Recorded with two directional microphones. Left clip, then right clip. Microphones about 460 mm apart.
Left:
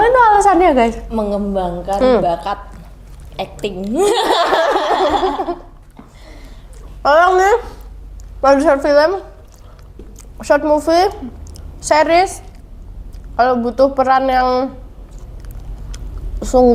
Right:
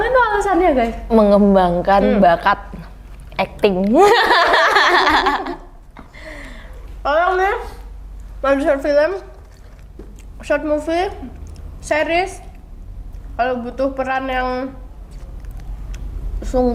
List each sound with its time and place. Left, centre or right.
0.0 s a sound: centre
1.1 s a woman's voice: right
3.3 s a sound: right
3.8 s speech: right
7.0 s a woman's voice: left
8.4 s a woman's voice: left
10.3 s a woman's voice: left
16.4 s a woman's voice: left